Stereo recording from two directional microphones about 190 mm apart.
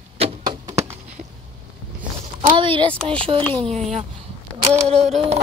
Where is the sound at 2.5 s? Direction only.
25° right (ahead or behind).